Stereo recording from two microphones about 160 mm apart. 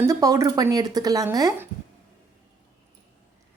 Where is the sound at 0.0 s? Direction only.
20° right (ahead or behind).